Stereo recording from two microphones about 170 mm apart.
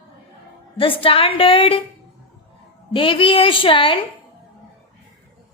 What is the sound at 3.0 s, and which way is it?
A woman's voice, 30° left (ahead or behind).